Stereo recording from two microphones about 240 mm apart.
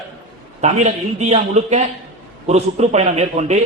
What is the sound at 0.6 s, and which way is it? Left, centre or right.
A man's voice, right.